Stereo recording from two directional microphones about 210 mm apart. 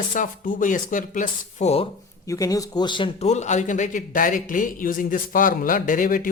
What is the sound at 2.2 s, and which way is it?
A man's voice, 15° left (ahead or behind).